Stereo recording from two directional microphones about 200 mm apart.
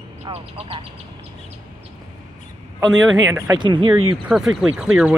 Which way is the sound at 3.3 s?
15° right (ahead or behind).